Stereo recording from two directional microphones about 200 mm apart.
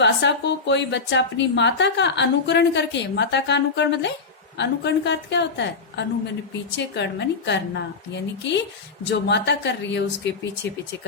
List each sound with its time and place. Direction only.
0.0 s a woman's voice: 60° left (ahead or behind)